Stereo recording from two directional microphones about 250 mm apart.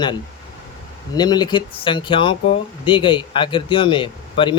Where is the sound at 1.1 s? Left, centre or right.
Centre.